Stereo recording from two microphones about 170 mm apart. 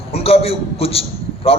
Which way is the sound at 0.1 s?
35° left (ahead or behind).